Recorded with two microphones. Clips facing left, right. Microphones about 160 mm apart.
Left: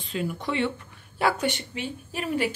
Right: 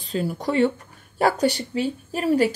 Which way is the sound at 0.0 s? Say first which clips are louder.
Right 5 dB; 35° right (ahead or behind).